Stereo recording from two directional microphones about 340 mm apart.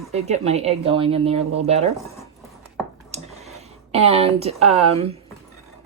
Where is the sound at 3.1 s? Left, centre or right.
Centre.